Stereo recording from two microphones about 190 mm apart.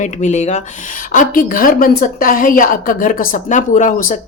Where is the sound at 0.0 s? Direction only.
40° left (ahead or behind).